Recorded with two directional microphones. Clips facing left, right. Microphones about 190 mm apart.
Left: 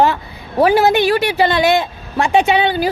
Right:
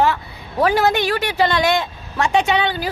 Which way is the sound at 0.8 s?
5° left (ahead or behind).